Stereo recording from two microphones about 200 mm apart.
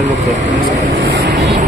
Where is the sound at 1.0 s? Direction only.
60° right (ahead or behind).